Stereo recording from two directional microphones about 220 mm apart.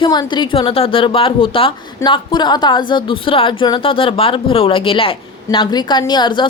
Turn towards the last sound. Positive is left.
turn(degrees=20)  # may be behind; listen again after turning